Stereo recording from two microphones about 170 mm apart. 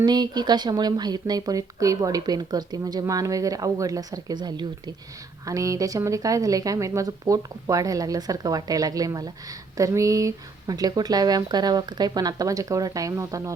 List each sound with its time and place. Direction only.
0.0 s speech: 25° right (ahead or behind)